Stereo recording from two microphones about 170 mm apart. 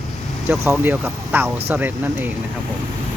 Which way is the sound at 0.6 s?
15° right (ahead or behind).